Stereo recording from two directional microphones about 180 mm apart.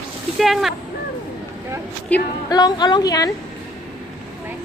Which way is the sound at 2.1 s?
10° left (ahead or behind).